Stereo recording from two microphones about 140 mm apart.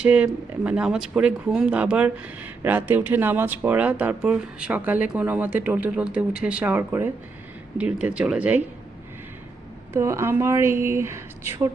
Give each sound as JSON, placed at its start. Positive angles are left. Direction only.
{"t": 0.0, "sound": "speech", "side_deg": -10}
{"t": 9.9, "sound": "speech", "side_deg": -20}